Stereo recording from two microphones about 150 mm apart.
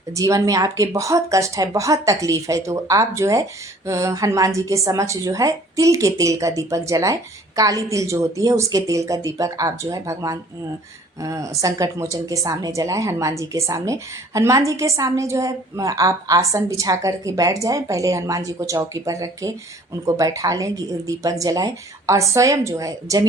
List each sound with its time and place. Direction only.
0.1 s speech: 20° right (ahead or behind)